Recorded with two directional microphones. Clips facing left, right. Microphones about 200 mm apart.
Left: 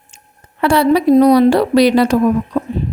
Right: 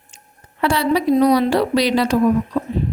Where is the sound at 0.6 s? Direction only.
55° left (ahead or behind).